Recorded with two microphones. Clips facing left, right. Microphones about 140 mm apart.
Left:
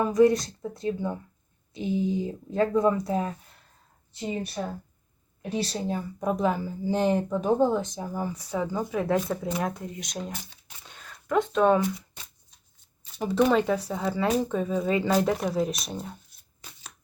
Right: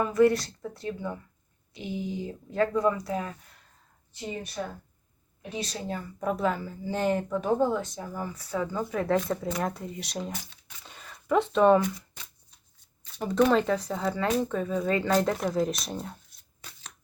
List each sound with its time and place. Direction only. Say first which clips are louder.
0.1 s speech: left 2 dB; 20° left (ahead or behind)
4.6 s speech: left 2 dB; 25° left (ahead or behind)
5.9 s speech: left 2 dB; 15° left (ahead or behind); by 10.4 s centre (ahead or behind)
10.8 s a sound: right 3 dB; centre (ahead or behind)
13.1 s speech: left 1 dB; 10° left (ahead or behind)